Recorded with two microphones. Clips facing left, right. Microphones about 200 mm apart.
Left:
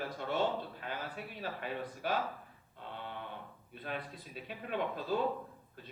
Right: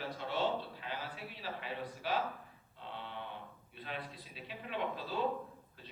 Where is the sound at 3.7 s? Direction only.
50° left (ahead or behind).